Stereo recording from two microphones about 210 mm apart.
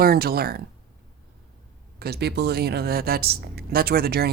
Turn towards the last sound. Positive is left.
turn(degrees=-50)  # may be behind; listen again after turning